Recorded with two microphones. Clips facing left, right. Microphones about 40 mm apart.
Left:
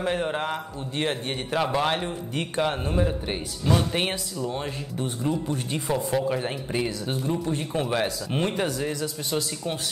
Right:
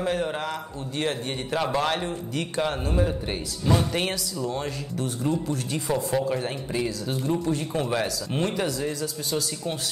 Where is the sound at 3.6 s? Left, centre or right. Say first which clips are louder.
Even; left.